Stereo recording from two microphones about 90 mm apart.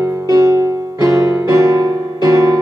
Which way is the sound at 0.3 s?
35° right (ahead or behind).